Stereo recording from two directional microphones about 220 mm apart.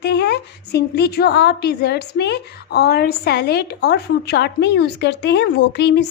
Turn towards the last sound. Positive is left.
turn(degrees=50)  # may be behind; listen again after turning